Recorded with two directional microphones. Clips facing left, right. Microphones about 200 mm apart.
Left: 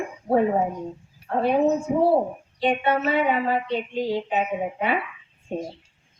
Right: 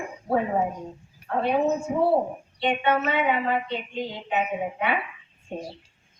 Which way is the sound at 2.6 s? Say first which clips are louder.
Left 2 dB; 35° left (ahead or behind).